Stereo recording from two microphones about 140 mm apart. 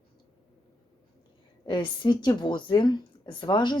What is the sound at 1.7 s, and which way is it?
A woman's voice, 30° left (ahead or behind).